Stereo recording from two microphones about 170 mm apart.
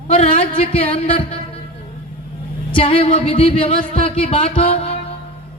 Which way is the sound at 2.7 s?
35° left (ahead or behind).